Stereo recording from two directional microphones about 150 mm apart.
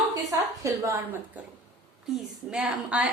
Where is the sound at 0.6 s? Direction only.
20° right (ahead or behind).